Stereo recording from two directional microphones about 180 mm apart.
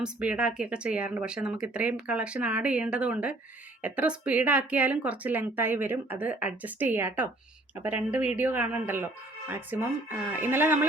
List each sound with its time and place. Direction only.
0.0 s a woman's voice: 5° right (ahead or behind)